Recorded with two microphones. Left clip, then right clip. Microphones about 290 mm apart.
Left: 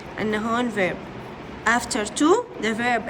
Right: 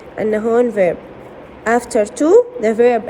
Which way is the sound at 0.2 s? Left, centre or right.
Centre.